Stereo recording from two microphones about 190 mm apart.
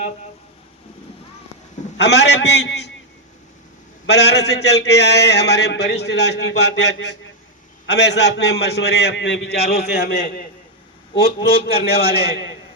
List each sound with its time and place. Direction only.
2.0 s a man's voice: 60° left (ahead or behind)
4.0 s a man's voice: 65° left (ahead or behind)
11.4 s a man's voice: 55° left (ahead or behind)